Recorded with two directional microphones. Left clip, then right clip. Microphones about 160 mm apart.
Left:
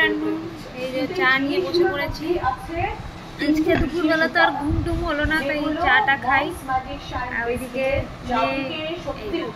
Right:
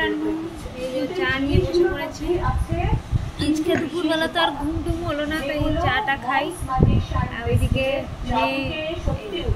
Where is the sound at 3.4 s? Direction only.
10° right (ahead or behind).